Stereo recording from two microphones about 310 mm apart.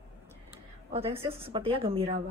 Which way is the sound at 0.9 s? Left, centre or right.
Centre.